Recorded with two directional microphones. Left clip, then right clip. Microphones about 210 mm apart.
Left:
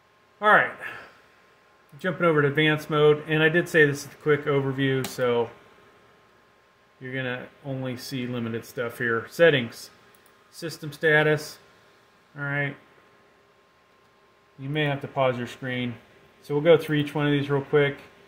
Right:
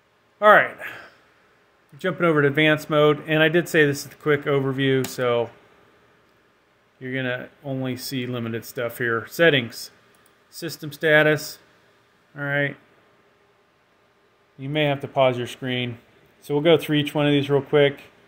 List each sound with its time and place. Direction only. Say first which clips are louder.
0.4 s speech: right 4 dB; 55° right (ahead or behind)
7.0 s speech: right 4 dB; 55° right (ahead or behind)
14.6 s speech: right 4 dB; 55° right (ahead or behind)